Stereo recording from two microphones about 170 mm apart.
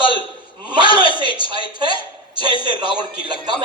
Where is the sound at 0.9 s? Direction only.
30° left (ahead or behind).